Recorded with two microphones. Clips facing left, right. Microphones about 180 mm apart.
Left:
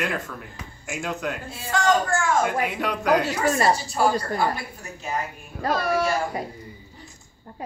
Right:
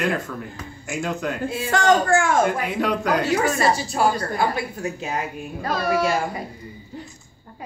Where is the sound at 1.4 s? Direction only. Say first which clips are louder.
Right 4 dB; 65° right (ahead or behind).